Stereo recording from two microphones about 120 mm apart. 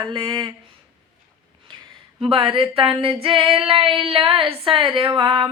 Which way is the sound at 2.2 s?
50° right (ahead or behind).